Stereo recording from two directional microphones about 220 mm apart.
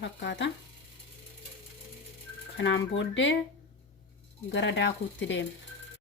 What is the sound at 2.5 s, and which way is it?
Speech, 55° left (ahead or behind).